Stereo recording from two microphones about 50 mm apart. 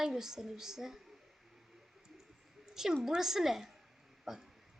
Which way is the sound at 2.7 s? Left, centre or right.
Centre.